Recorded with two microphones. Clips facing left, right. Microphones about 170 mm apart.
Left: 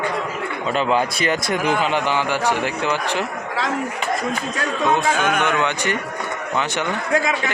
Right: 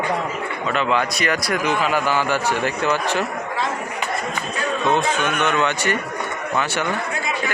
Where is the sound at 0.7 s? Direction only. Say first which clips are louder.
Left 1 dB; 35° left (ahead or behind); by 3.2 s 15° left (ahead or behind).